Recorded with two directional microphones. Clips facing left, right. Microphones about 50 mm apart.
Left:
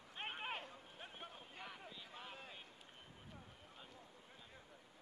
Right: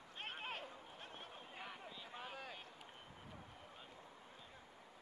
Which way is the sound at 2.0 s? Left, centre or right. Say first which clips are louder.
Right 3 dB; centre.